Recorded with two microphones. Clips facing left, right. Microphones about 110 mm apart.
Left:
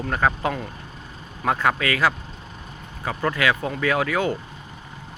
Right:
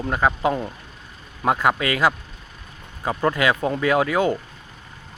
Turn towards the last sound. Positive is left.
turn(degrees=-20)  # may be behind; listen again after turning